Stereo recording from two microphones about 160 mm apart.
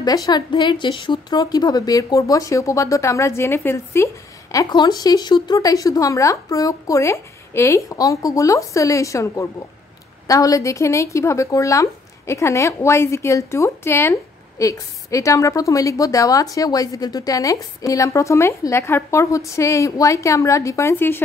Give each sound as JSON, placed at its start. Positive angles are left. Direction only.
{"t": 0.0, "sound": "a woman's voice", "side_deg": 25}